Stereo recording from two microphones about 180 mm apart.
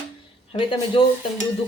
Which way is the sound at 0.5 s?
30° left (ahead or behind).